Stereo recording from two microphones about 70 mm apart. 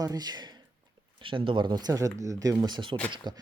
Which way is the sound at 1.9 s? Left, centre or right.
Right.